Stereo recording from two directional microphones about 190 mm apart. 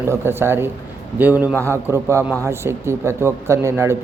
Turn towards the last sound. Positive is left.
turn(degrees=-15)  # may be behind; listen again after turning